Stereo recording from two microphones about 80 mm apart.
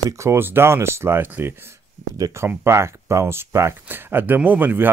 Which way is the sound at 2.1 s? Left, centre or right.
Right.